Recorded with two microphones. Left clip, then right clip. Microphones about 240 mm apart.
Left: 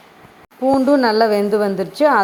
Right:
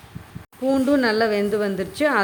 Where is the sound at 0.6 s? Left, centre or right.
Centre.